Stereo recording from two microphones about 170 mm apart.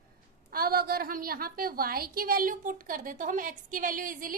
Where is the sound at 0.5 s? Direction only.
60° right (ahead or behind).